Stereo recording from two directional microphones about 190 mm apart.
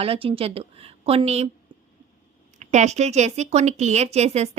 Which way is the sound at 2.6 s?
35° right (ahead or behind).